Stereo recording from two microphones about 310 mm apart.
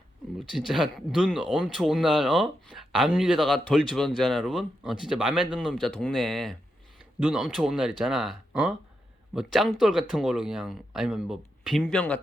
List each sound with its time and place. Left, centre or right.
0.3 s speech: centre